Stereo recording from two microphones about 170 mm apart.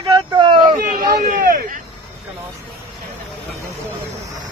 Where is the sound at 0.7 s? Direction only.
50° right (ahead or behind).